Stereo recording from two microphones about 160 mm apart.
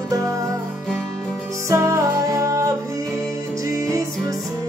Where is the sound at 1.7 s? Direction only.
20° right (ahead or behind).